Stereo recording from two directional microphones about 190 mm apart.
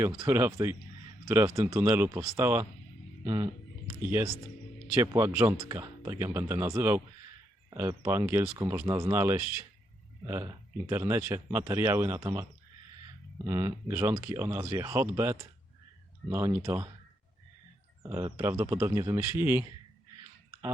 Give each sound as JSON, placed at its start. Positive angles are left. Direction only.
{"t": 0.0, "sound": "speech", "side_deg": -20}
{"t": 4.9, "sound": "speech", "side_deg": -15}
{"t": 18.0, "sound": "speech", "side_deg": -20}